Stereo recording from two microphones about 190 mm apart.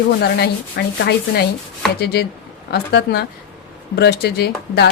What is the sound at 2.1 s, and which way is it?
Speech, 60° left (ahead or behind).